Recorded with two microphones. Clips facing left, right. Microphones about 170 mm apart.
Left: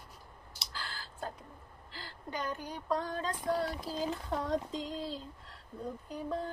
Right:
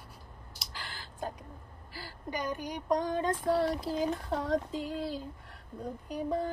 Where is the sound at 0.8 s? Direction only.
15° right (ahead or behind).